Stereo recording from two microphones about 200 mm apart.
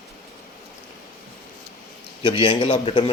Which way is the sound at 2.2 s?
25° left (ahead or behind).